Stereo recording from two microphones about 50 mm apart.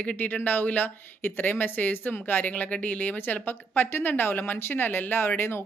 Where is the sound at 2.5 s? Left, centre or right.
Left.